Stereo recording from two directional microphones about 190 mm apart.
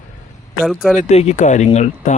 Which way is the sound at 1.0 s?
35° left (ahead or behind).